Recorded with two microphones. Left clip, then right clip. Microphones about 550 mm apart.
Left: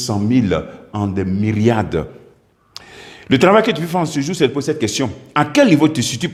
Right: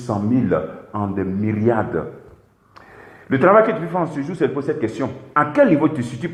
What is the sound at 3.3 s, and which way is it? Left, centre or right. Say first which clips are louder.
A man's voice: left 1 dB; left.